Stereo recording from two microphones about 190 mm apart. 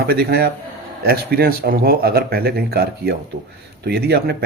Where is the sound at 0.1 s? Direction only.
55° right (ahead or behind).